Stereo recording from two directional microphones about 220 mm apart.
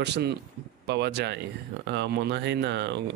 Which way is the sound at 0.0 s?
50° right (ahead or behind).